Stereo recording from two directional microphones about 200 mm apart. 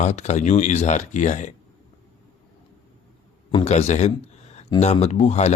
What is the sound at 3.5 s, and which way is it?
Speech, 30° left (ahead or behind).